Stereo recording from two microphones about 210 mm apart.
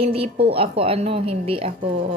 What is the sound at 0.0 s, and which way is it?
Speech, 25° right (ahead or behind).